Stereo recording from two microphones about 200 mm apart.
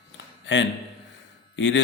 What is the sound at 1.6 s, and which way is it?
Speech, 65° left (ahead or behind).